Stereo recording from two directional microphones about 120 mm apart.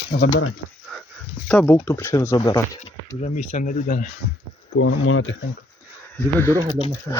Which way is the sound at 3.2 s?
85° left.